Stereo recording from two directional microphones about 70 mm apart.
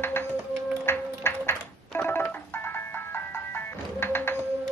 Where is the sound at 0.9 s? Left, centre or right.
Left.